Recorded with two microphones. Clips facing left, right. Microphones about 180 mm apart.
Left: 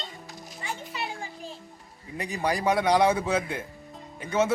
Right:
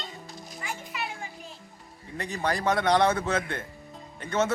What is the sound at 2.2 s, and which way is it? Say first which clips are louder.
A man's voice: left 1 dB; 10° left (ahead or behind).